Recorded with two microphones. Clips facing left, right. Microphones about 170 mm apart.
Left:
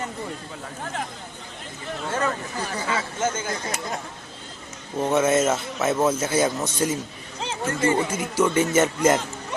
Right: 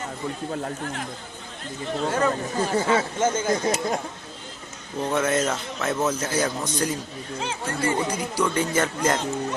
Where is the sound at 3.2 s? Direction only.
10° right (ahead or behind).